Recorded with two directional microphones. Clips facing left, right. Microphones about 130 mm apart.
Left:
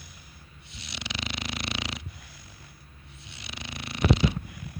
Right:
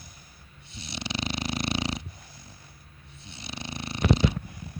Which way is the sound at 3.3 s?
25° right (ahead or behind).